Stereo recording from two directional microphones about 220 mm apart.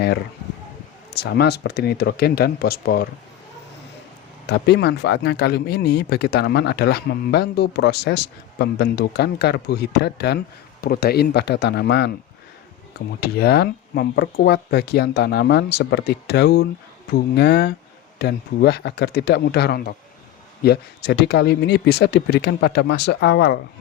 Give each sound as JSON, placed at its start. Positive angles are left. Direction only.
{"t": 1.1, "sound": "speech", "side_deg": 50}
{"t": 4.4, "sound": "speech", "side_deg": 50}
{"t": 13.1, "sound": "speech", "side_deg": 45}